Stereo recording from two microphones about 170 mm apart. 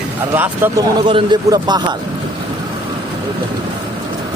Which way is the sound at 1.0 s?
30° right (ahead or behind).